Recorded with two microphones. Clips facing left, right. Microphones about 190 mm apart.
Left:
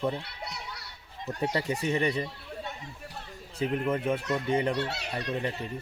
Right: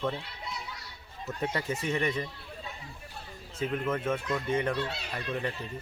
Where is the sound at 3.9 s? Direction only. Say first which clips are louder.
Left 2 dB; 15° left (ahead or behind).